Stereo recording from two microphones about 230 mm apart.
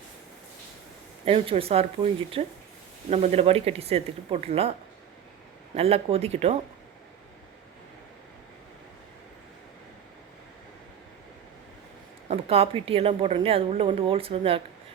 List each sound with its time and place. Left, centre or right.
1.2 s a woman's voice: right
5.7 s a woman's voice: right
12.3 s a woman's voice: right